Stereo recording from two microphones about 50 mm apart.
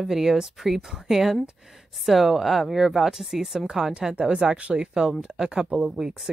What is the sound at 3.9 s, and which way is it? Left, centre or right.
Speech, right.